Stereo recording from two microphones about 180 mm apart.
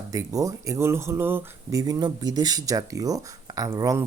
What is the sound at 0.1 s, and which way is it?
Speech, 20° right (ahead or behind).